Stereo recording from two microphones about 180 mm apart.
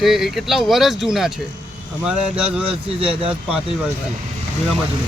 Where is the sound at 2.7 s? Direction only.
30° right (ahead or behind).